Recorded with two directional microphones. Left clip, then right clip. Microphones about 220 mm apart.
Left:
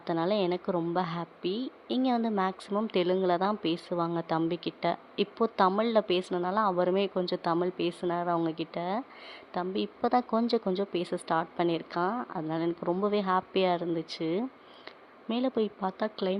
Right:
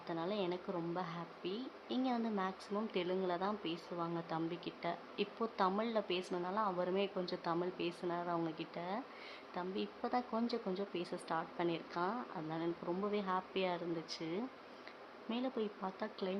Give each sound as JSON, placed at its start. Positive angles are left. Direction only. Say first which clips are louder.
{"t": 0.0, "sound": "speech", "louder": "left 11 dB", "side_deg": 30}